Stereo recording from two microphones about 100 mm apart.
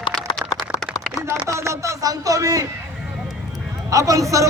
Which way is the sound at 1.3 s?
30° right (ahead or behind).